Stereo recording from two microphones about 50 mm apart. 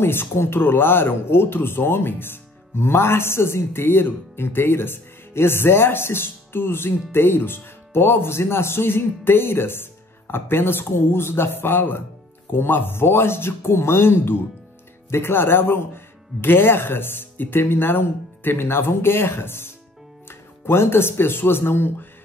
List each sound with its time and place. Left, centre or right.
0.0 s speech: left